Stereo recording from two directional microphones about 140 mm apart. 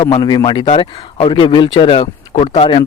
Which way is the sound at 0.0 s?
35° left (ahead or behind).